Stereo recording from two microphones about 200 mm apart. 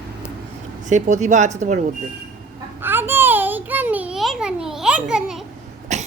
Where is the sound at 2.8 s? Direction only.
10° right (ahead or behind).